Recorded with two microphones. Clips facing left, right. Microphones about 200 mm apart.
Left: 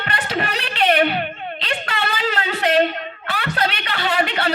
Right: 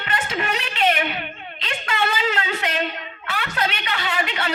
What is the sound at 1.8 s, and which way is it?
Music, 35° left (ahead or behind).